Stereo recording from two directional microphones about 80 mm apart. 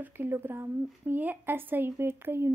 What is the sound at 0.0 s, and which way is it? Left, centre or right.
A woman's voice, right.